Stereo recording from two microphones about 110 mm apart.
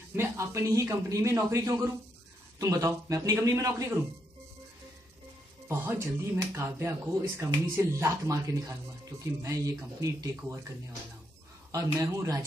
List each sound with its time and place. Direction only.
0.1 s speech: 25° right (ahead or behind)
5.7 s speech: 25° right (ahead or behind)
11.7 s speech: 30° right (ahead or behind)